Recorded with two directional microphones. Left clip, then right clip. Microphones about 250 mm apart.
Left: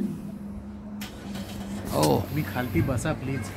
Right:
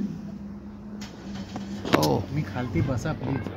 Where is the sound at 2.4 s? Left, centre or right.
Right.